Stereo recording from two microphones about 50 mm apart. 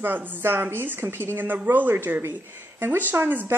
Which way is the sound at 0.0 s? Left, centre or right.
Right.